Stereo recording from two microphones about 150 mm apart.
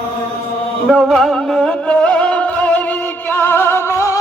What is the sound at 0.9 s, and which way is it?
Music, centre (ahead or behind).